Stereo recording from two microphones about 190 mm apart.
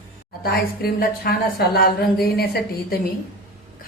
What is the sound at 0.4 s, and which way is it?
A woman's voice, 50° left (ahead or behind).